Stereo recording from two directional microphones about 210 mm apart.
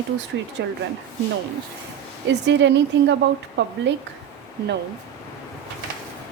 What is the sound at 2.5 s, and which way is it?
Speech, 55° right (ahead or behind).